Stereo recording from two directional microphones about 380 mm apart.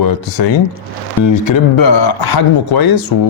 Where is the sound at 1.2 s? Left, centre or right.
Left.